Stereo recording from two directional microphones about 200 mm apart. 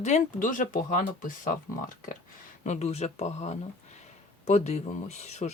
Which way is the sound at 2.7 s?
35° left (ahead or behind).